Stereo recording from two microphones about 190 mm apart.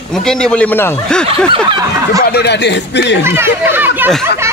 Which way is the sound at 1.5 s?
25° right (ahead or behind).